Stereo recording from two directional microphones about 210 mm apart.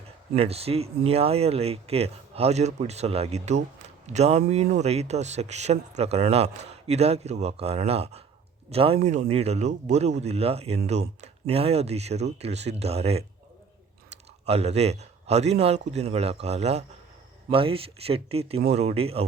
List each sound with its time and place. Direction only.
0.3 s speech: 30° right (ahead or behind)
14.4 s speech: 30° right (ahead or behind)